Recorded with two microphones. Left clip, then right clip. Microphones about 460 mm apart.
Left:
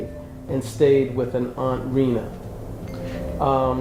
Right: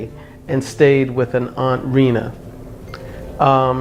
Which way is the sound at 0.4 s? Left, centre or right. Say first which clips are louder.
Right 5 dB; right.